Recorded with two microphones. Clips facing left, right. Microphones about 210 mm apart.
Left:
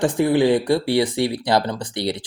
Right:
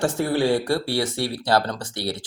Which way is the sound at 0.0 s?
15° left (ahead or behind).